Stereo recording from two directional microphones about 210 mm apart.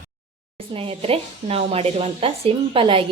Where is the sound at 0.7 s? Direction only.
25° right (ahead or behind).